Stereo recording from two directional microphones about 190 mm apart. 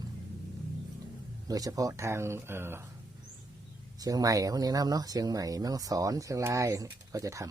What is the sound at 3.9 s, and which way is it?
Speech, 20° right (ahead or behind).